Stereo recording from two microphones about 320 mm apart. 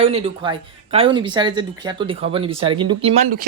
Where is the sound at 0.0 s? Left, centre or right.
Centre.